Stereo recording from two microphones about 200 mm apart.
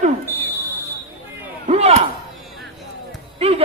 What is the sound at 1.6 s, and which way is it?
Speech, 30° right (ahead or behind).